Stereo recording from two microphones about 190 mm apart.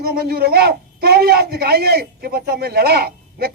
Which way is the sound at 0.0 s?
55° right (ahead or behind).